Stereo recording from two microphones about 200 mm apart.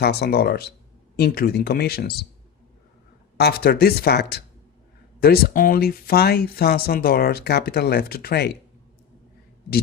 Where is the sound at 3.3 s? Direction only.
50° left (ahead or behind).